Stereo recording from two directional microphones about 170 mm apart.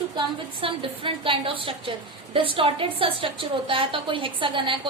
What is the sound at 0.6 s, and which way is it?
A woman's voice, 30° right (ahead or behind).